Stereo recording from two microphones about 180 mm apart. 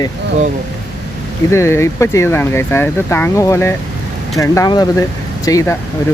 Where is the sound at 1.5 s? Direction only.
15° left (ahead or behind).